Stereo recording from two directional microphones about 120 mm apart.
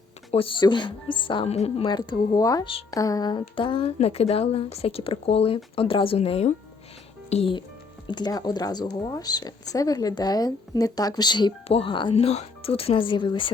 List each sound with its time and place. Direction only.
0.3 s speech: 45° left (ahead or behind)
3.5 s speech: 45° left (ahead or behind)
3.9 s speech: 60° left (ahead or behind)
8.0 s speech: 35° left (ahead or behind)
12.1 s speech: 60° left (ahead or behind); by 13.5 s 40° left (ahead or behind)